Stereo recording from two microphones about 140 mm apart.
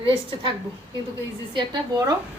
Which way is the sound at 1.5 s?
30° right (ahead or behind).